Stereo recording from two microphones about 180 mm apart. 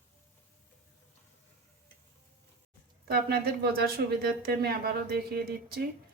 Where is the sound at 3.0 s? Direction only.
60° right (ahead or behind).